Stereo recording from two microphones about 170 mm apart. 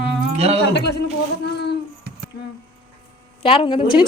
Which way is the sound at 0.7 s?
80° left.